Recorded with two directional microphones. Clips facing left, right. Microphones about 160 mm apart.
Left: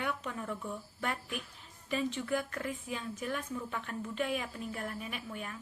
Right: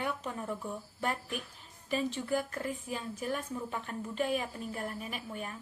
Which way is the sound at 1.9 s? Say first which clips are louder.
Right 1 dB; 35° right (ahead or behind).